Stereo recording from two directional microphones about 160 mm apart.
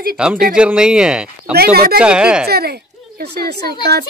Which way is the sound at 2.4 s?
75° right (ahead or behind).